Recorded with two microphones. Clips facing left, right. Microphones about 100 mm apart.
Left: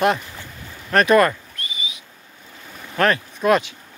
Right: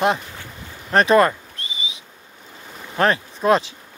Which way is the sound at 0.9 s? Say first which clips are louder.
Even; 25° right (ahead or behind).